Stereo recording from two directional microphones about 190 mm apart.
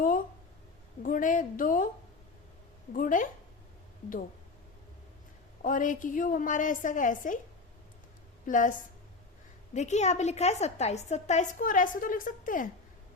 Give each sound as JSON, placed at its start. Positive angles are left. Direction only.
{"t": 0.0, "sound": "a sound", "side_deg": 50}
{"t": 1.0, "sound": "a woman's voice", "side_deg": 45}
{"t": 2.9, "sound": "a woman's voice", "side_deg": 45}
{"t": 5.6, "sound": "a woman's voice", "side_deg": 45}
{"t": 8.4, "sound": "a woman's voice", "side_deg": 45}
{"t": 9.7, "sound": "a woman's voice", "side_deg": 35}